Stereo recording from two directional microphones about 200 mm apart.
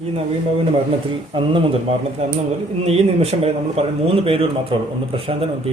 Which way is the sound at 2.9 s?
30° right (ahead or behind).